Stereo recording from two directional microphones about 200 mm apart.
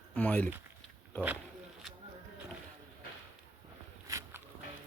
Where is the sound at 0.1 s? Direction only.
5° left (ahead or behind).